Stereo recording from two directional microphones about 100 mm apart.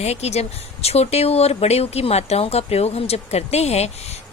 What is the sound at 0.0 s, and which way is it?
Speech, 90° left.